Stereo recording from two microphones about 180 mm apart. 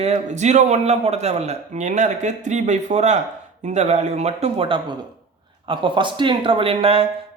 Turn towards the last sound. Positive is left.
turn(degrees=-30)  # may be behind; listen again after turning